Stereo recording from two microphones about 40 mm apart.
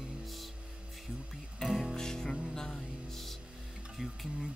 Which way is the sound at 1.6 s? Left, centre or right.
Centre.